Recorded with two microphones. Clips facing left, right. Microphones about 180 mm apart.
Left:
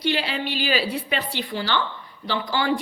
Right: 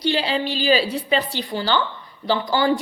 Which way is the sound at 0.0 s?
30° right (ahead or behind).